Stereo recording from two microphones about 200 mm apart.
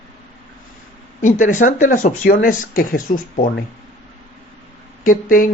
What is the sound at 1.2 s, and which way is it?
Speech, 40° left (ahead or behind).